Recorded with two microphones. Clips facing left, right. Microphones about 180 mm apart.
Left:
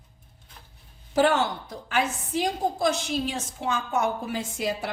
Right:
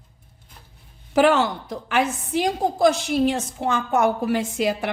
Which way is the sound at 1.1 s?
90° right.